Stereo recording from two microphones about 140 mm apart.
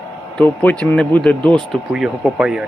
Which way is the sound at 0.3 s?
10° left (ahead or behind).